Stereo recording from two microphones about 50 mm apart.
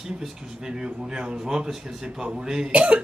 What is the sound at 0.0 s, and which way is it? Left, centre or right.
Speech, centre.